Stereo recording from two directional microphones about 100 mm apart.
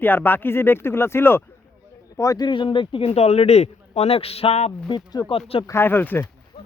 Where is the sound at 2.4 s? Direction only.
55° left (ahead or behind); by 4.7 s 85° left.